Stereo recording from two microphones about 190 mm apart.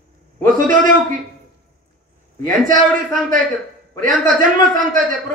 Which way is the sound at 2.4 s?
45° right (ahead or behind).